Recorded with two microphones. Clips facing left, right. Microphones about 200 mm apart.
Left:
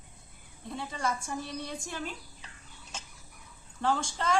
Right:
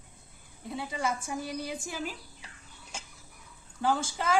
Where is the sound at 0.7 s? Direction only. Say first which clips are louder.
Right 1 dB; 5° right (ahead or behind).